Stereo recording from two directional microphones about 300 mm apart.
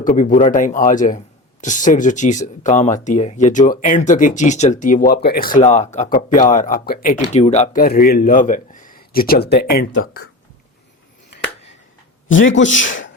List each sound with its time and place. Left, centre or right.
0.0 s speech: left
12.3 s speech: left